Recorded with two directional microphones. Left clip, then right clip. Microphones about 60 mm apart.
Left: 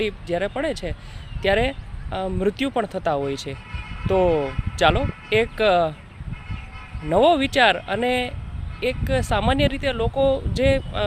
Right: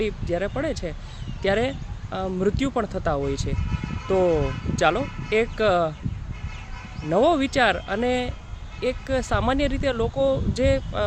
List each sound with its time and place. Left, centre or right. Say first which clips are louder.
0.3 s speech: left 3 dB; centre; by 5.9 s right
7.1 s speech: left 3 dB; centre